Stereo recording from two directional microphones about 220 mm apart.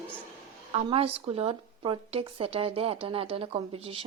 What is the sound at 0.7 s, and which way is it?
A woman's voice, 25° right (ahead or behind).